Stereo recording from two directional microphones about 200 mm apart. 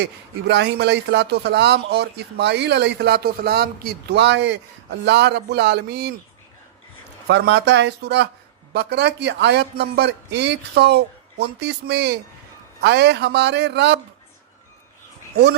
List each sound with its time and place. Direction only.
0.0 s speech: 60° right (ahead or behind)
7.3 s speech: 60° right (ahead or behind)